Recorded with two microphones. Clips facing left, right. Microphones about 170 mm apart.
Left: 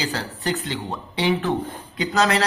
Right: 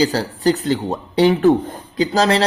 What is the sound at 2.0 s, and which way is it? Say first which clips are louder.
Speech: right 5 dB; 30° right (ahead or behind).